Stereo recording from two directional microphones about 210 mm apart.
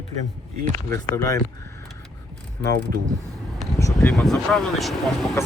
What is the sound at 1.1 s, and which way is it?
Speech, 15° left (ahead or behind).